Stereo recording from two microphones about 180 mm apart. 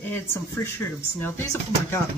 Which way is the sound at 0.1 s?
15° left (ahead or behind).